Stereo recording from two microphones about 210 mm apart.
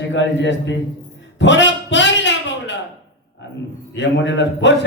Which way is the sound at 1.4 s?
60° left (ahead or behind).